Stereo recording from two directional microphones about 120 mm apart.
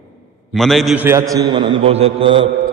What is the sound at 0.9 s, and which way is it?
A man's voice, 20° right (ahead or behind).